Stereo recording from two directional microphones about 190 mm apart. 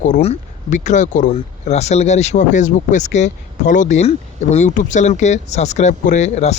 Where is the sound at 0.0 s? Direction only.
35° left (ahead or behind).